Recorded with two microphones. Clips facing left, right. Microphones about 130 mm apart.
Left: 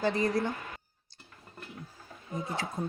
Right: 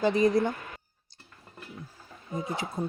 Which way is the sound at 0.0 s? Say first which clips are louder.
Right 5 dB; 15° right (ahead or behind).